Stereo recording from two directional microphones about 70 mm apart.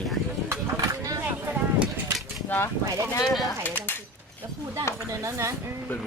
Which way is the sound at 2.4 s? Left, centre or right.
Left.